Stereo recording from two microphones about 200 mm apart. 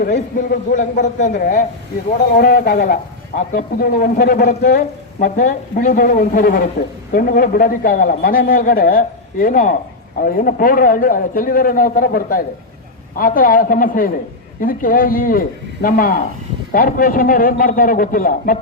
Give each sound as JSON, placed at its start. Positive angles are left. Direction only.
{"t": 0.0, "sound": "a man's voice", "side_deg": 45}
{"t": 2.4, "sound": "speech", "side_deg": 50}